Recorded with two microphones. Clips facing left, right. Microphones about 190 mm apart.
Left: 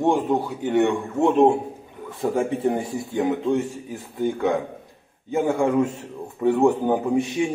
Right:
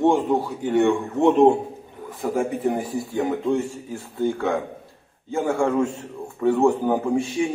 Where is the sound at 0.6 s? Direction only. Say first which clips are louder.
Even; 20° left (ahead or behind).